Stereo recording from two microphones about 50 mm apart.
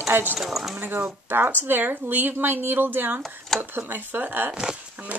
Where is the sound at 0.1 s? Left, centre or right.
Right.